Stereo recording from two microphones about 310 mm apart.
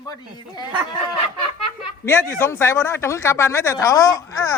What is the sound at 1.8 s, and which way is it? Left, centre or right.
Speech, centre.